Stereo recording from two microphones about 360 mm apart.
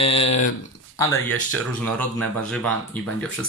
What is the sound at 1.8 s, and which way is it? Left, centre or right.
Speech, centre.